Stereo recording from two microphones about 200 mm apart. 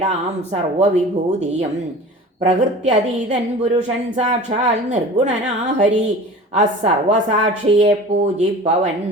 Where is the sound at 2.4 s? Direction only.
35° right (ahead or behind).